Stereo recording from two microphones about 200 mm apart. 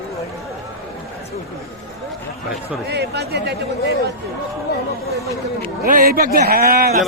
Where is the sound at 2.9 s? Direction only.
55° right (ahead or behind).